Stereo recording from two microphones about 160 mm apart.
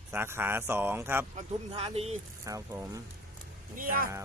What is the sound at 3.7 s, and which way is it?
Speech, 60° right (ahead or behind).